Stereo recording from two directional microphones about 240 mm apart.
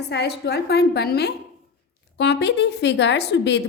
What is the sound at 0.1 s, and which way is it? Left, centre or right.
A woman's voice, left.